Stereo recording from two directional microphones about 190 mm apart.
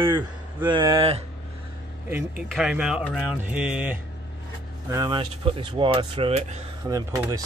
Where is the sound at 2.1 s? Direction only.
10° right (ahead or behind).